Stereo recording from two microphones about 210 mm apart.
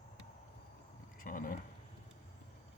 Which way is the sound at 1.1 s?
40° left (ahead or behind).